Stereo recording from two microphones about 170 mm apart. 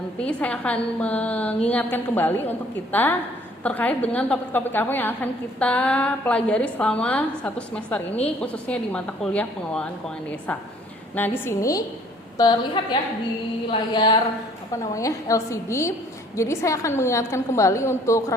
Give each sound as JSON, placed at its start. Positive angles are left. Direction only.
{"t": 0.2, "sound": "a woman's voice", "side_deg": 5}
{"t": 11.1, "sound": "a woman's voice", "side_deg": 10}